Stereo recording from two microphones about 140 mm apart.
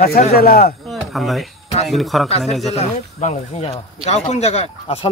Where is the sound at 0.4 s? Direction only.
90° left.